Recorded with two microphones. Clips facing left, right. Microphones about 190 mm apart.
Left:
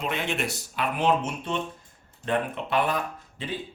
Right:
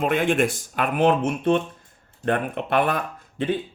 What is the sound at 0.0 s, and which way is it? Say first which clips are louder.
Speech: right 9 dB; 50° right (ahead or behind).